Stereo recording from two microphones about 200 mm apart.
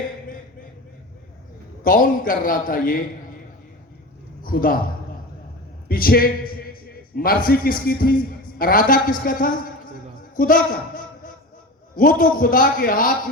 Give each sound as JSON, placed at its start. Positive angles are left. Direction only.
{"t": 1.8, "sound": "a man's voice", "side_deg": 45}
{"t": 4.4, "sound": "a man's voice", "side_deg": 45}
{"t": 5.9, "sound": "a man's voice", "side_deg": 45}
{"t": 6.9, "sound": "a sound", "side_deg": 45}
{"t": 7.4, "sound": "a man's voice", "side_deg": 45}